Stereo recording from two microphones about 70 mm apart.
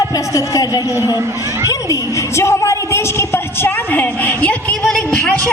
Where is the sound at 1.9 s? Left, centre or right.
Left.